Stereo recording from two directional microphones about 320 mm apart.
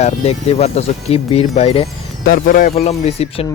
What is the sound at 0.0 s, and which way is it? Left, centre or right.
Speech, centre.